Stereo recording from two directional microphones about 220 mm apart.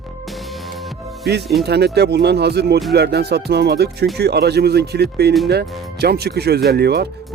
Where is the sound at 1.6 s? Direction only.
50° right (ahead or behind).